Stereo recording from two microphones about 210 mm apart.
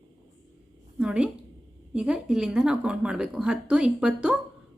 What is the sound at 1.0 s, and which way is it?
A woman's voice, 5° right (ahead or behind).